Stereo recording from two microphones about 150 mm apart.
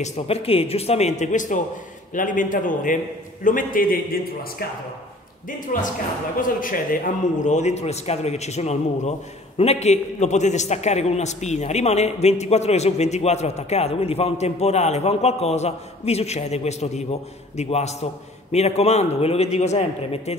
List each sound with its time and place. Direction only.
0.0 s a man's voice: 45° left (ahead or behind); by 4.6 s 80° left
5.7 s a man's voice: 65° left (ahead or behind); by 20.3 s 45° left (ahead or behind)